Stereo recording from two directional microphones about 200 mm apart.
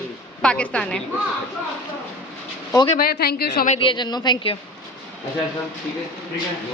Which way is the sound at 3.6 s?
25° left (ahead or behind).